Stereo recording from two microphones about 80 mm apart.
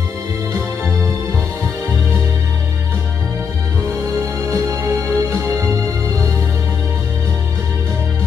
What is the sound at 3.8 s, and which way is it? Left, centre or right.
Music, right.